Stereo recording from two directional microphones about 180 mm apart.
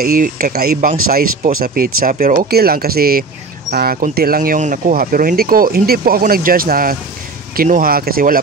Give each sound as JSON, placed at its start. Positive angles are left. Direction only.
{"t": 0.0, "sound": "speech", "side_deg": -50}